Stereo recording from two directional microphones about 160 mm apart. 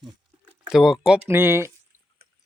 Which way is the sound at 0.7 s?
Centre (ahead or behind).